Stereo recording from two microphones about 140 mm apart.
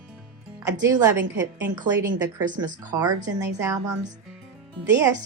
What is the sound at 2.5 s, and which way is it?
Speech, 25° right (ahead or behind).